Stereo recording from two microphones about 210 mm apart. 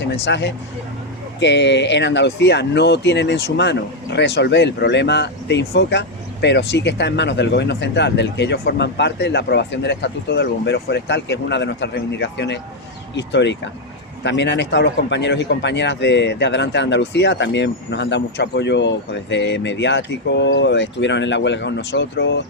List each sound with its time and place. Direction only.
0.3 s speech: 55° left (ahead or behind)